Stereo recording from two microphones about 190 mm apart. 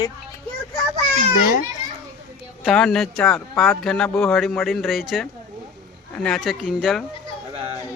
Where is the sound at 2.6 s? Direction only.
Centre (ahead or behind).